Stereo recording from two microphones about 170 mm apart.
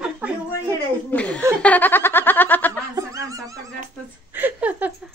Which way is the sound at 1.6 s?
10° left (ahead or behind).